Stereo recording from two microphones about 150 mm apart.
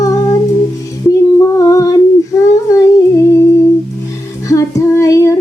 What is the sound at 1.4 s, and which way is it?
Female singing, 20° left (ahead or behind).